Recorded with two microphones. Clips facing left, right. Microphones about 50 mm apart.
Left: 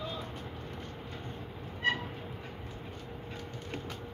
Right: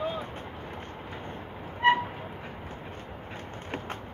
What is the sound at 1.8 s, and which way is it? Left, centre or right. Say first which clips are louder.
Vehicle: right 9 dB; right.